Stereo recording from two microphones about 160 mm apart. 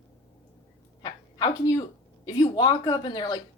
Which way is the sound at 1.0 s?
30° left (ahead or behind).